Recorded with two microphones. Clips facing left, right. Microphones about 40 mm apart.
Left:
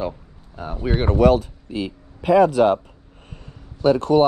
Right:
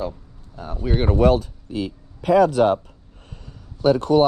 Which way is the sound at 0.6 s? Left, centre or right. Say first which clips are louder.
Left 2 dB; centre.